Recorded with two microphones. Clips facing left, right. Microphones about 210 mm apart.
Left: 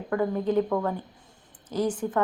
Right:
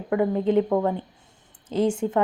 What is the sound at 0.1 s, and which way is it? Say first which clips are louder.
Speech: right 4 dB; 20° right (ahead or behind).